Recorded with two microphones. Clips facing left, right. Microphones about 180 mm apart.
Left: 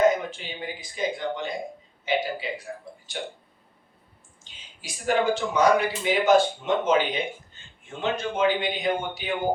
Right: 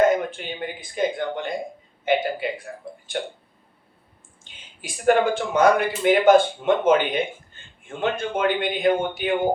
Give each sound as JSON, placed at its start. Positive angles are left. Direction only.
{"t": 0.2, "sound": "speech", "side_deg": -55}
{"t": 4.5, "sound": "a sound", "side_deg": -55}
{"t": 4.8, "sound": "speech", "side_deg": -55}